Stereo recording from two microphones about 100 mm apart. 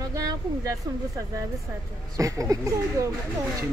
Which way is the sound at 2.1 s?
35° right (ahead or behind).